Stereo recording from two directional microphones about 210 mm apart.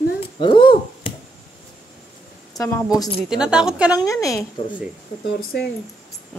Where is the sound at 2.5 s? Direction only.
15° left (ahead or behind).